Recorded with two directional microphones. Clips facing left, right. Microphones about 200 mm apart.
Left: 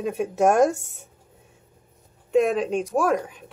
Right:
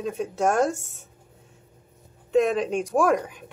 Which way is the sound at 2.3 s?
5° left (ahead or behind).